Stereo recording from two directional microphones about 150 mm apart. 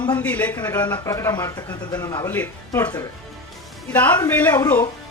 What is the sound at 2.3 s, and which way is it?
Speech, 10° left (ahead or behind).